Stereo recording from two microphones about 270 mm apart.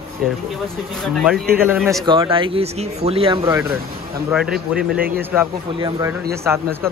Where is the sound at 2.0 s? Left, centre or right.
Centre.